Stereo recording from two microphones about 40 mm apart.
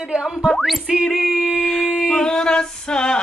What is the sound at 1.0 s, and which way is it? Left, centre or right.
A woman's voice, centre.